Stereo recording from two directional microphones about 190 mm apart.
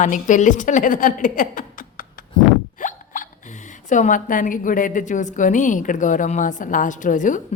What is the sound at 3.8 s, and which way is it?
A woman's voice, 40° left (ahead or behind).